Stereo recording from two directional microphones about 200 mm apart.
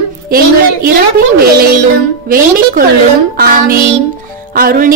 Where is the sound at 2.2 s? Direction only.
45° right (ahead or behind).